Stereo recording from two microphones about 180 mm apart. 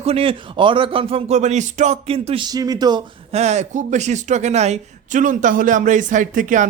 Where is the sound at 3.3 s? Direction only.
40° right (ahead or behind).